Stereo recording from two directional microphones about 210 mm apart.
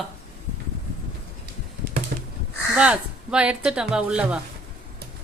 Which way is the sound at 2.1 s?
50° right (ahead or behind).